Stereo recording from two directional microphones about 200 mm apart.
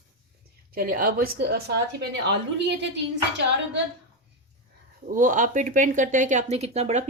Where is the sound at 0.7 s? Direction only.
45° right (ahead or behind).